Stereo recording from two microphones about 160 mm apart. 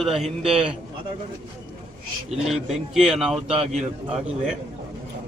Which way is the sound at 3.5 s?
40° right (ahead or behind).